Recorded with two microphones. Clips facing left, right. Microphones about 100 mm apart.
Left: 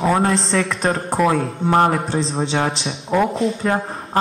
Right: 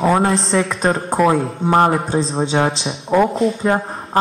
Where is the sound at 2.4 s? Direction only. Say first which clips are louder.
Right 4 dB; 30° right (ahead or behind).